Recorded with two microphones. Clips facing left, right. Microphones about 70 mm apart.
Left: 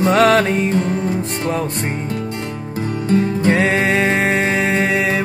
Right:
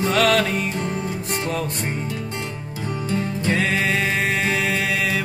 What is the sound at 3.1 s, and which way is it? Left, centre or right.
Music, left.